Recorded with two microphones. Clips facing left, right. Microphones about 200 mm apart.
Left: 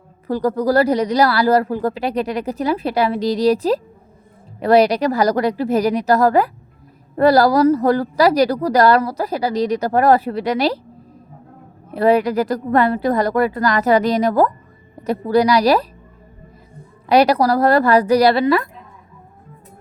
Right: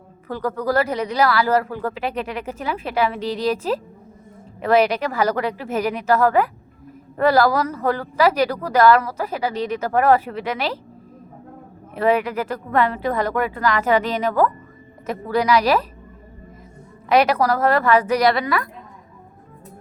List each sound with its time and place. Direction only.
0.3 s a woman's voice: 35° left (ahead or behind)
11.9 s a woman's voice: 35° left (ahead or behind)
17.1 s a woman's voice: 35° left (ahead or behind)